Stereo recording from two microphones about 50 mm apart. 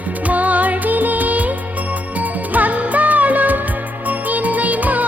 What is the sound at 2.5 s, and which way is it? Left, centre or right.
Music, right.